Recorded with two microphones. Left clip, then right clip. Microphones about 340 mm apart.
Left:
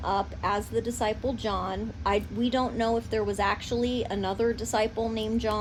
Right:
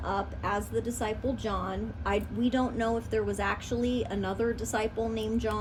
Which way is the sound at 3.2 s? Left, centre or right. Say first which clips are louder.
Left 3 dB; left.